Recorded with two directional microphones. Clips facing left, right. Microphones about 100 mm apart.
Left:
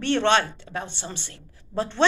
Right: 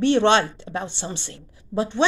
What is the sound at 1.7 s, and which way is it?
Speech, 10° right (ahead or behind).